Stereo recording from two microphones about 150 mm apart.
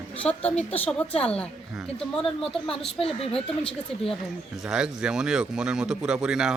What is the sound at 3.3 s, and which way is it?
Speech, 5° left (ahead or behind).